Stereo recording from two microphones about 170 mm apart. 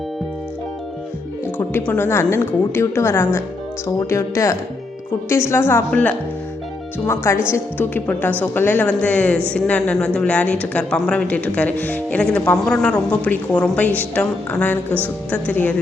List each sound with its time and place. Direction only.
1.5 s a woman's voice: 10° left (ahead or behind)
7.5 s a woman's voice: 10° left (ahead or behind)